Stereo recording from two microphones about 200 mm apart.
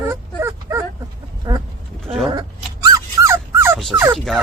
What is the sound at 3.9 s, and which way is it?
Turkey, 10° right (ahead or behind).